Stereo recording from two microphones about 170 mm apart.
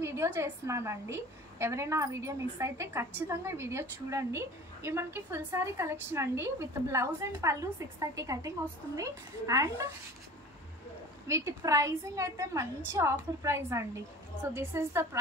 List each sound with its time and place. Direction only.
0.0 s a woman's voice: 15° right (ahead or behind)
11.2 s a woman's voice: 20° right (ahead or behind)